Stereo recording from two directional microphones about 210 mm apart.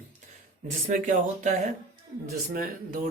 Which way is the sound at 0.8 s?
40° right (ahead or behind).